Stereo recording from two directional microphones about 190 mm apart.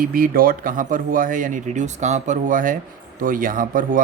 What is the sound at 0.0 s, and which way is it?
A man's voice, 50° right (ahead or behind).